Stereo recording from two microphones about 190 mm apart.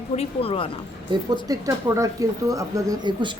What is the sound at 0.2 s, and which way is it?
Speech, 30° left (ahead or behind).